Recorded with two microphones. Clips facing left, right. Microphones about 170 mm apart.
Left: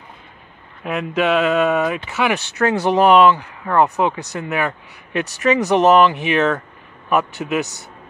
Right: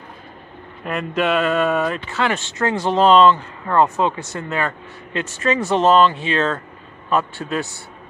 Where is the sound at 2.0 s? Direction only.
15° left (ahead or behind).